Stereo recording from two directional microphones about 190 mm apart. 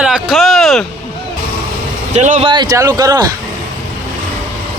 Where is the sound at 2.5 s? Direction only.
20° right (ahead or behind).